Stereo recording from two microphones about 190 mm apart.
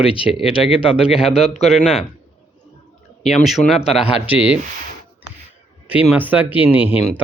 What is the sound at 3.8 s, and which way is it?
Speech, 30° left (ahead or behind).